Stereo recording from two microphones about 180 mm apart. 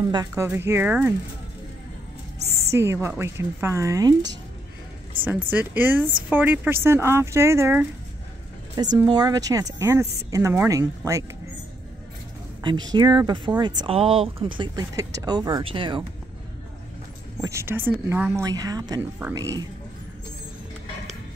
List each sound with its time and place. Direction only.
0.1 s speech: 20° right (ahead or behind)
2.7 s speech: 15° right (ahead or behind)
5.2 s speech: 10° right (ahead or behind)
8.9 s speech: 25° right (ahead or behind)
12.6 s speech: 25° right (ahead or behind)
17.4 s speech: 15° right (ahead or behind)